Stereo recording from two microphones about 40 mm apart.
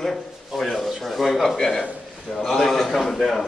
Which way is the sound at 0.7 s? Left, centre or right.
Centre.